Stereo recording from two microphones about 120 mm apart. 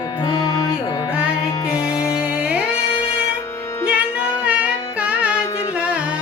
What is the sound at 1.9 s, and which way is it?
Music, 30° left (ahead or behind).